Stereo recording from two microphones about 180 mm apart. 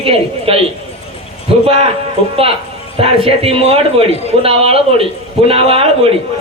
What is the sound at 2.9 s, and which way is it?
A man's voice, 35° right (ahead or behind).